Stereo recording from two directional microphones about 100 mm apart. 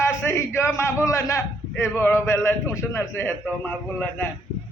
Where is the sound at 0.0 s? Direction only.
25° left (ahead or behind).